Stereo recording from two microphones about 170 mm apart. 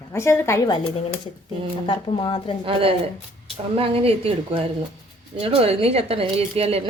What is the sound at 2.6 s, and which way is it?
A woman's voice, 35° right (ahead or behind).